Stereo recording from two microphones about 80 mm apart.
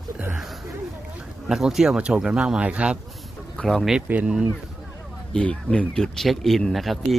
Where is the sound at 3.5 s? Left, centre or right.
Centre.